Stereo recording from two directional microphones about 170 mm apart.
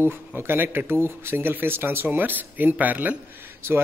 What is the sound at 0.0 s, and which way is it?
Speech, 15° right (ahead or behind).